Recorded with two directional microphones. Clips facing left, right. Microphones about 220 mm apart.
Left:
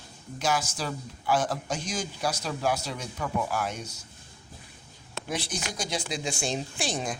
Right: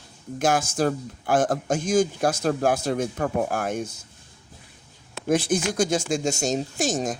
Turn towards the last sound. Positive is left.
turn(degrees=-45)  # may be behind; listen again after turning